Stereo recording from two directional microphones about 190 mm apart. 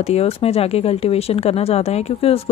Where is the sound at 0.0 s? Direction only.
35° left (ahead or behind).